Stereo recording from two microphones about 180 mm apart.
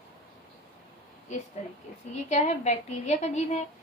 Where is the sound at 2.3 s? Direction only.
40° left (ahead or behind).